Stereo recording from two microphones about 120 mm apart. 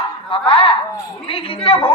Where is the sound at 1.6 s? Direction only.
50° left (ahead or behind).